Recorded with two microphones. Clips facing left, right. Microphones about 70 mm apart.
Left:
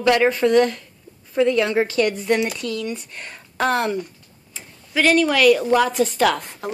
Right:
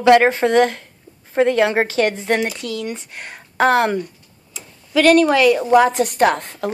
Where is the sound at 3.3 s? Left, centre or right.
Right.